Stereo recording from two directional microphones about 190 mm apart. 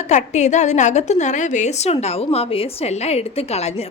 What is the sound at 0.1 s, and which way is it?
A woman's voice, 40° left (ahead or behind).